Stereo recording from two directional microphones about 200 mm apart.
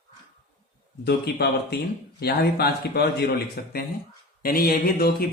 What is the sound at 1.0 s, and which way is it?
Speech, 55° left (ahead or behind).